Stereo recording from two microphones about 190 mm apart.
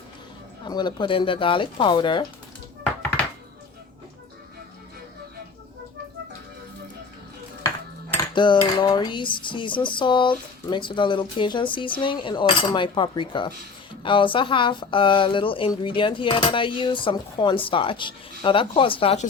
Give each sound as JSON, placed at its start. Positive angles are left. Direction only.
{"t": 0.6, "sound": "speech", "side_deg": 20}
{"t": 8.3, "sound": "speech", "side_deg": 25}